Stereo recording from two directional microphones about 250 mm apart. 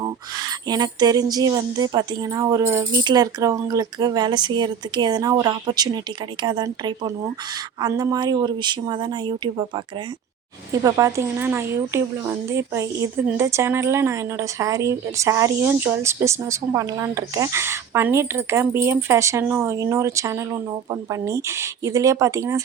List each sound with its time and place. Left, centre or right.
0.0 s speech: centre